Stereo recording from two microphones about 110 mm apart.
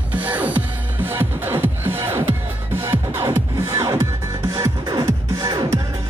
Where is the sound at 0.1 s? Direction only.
15° right (ahead or behind).